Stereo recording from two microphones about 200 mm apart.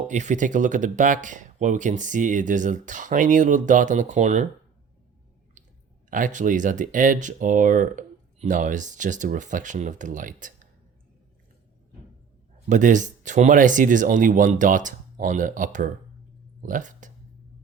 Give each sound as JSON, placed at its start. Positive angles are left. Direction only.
{"t": 0.1, "sound": "speech", "side_deg": -35}
{"t": 6.1, "sound": "speech", "side_deg": -40}
{"t": 12.6, "sound": "speech", "side_deg": -40}